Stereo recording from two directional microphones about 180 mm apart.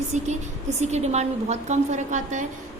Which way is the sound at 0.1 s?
40° right (ahead or behind).